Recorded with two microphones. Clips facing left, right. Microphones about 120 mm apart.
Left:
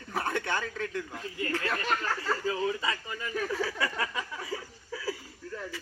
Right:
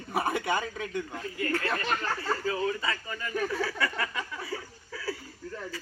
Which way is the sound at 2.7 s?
15° left (ahead or behind).